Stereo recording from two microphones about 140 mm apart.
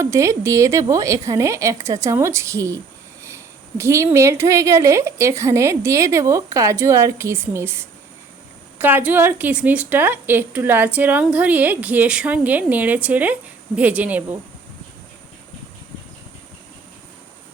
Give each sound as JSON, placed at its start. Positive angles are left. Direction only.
{"t": 0.0, "sound": "a woman's voice", "side_deg": -20}